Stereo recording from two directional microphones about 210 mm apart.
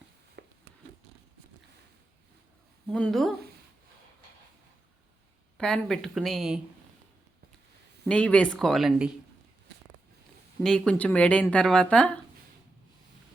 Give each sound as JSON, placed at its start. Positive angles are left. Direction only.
{"t": 0.4, "sound": "a sound", "side_deg": -55}
{"t": 2.9, "sound": "speech", "side_deg": 0}
{"t": 5.5, "sound": "speech", "side_deg": 5}
{"t": 8.0, "sound": "speech", "side_deg": 5}
{"t": 10.6, "sound": "speech", "side_deg": 5}